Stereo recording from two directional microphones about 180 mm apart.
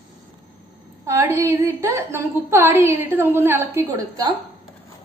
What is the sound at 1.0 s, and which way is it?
A woman's voice, 15° right (ahead or behind).